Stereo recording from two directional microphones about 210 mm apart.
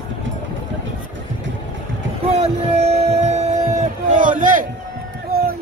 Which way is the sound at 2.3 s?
30° right (ahead or behind).